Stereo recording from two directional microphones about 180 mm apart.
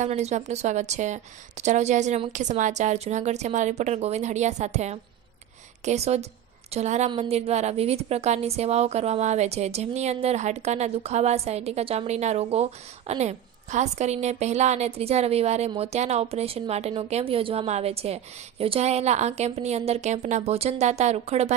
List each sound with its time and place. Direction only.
0.0 s a woman's voice: 40° right (ahead or behind)